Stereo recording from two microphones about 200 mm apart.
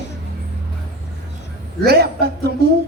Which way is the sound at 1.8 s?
50° right (ahead or behind).